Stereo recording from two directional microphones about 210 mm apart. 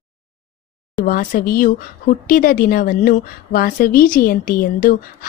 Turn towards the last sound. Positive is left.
turn(degrees=40)  # may be behind; listen again after turning